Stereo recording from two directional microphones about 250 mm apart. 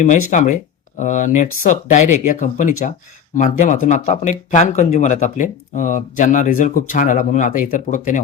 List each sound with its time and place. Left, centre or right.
0.0 s speech: left